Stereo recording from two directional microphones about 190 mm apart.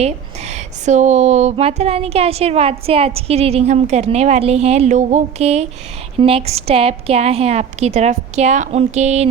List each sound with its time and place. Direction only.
0.0 s speech: 35° right (ahead or behind)